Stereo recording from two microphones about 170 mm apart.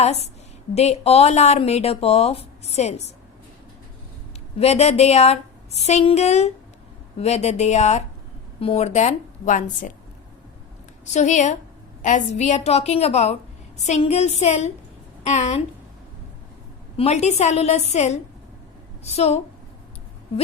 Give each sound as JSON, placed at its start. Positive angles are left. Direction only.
{"t": 0.0, "sound": "speech", "side_deg": 40}
{"t": 4.6, "sound": "a woman's voice", "side_deg": 40}
{"t": 11.0, "sound": "a woman's voice", "side_deg": 45}
{"t": 17.0, "sound": "speech", "side_deg": 40}